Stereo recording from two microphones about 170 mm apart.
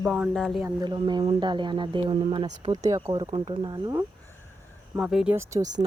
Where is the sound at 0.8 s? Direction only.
25° right (ahead or behind).